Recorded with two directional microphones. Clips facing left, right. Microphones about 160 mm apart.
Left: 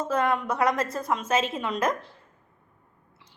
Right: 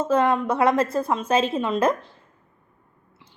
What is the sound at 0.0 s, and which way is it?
A woman's voice, 25° right (ahead or behind).